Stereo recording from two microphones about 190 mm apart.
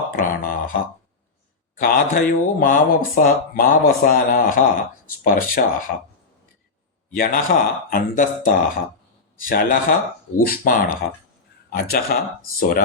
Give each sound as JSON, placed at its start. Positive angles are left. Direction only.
{"t": 0.2, "sound": "speech", "side_deg": 45}
{"t": 1.8, "sound": "speech", "side_deg": 50}
{"t": 7.1, "sound": "speech", "side_deg": 45}